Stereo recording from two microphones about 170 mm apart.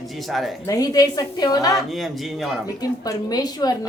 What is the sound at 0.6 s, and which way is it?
A woman's voice, 20° left (ahead or behind).